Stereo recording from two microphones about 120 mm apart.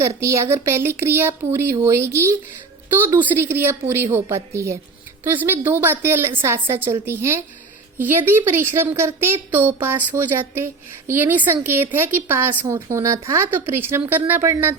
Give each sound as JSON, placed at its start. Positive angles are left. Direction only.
{"t": 0.0, "sound": "speech", "side_deg": -25}
{"t": 3.3, "sound": "a woman's voice", "side_deg": -20}